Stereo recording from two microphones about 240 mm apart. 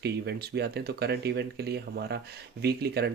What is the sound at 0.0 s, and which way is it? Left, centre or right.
Speech, right.